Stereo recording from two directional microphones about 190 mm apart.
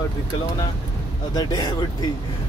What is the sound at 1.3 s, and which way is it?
Speech, 20° left (ahead or behind).